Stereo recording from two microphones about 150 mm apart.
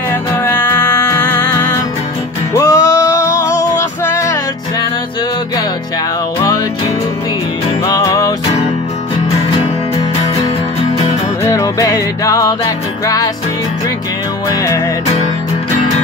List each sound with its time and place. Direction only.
0.1 s music: 15° left (ahead or behind)
2.5 s music: 20° left (ahead or behind)
7.8 s music: 25° left (ahead or behind)
11.0 s music: 20° left (ahead or behind)
14.5 s music: 20° left (ahead or behind)